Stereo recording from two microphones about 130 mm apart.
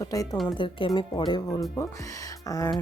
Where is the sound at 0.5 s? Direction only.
40° left (ahead or behind).